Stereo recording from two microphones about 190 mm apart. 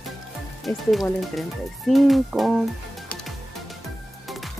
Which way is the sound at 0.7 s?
Centre (ahead or behind).